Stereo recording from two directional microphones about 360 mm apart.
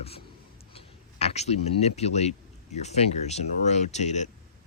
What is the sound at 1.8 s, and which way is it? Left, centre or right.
Speech, centre.